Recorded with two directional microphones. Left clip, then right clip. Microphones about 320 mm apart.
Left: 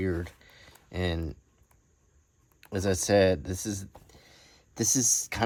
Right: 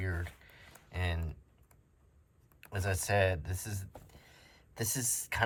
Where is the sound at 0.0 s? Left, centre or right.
Centre.